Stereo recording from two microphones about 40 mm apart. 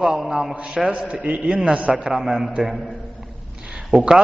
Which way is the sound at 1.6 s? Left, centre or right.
Right.